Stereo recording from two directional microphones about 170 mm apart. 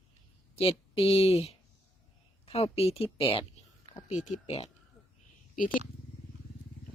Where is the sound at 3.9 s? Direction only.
35° left (ahead or behind).